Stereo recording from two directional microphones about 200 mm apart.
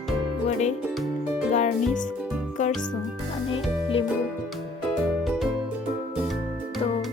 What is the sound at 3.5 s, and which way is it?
Speech, 25° left (ahead or behind).